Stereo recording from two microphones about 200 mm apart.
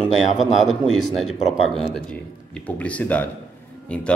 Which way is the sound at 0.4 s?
Centre (ahead or behind).